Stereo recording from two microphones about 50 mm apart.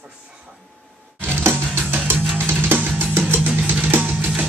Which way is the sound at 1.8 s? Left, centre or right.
Right.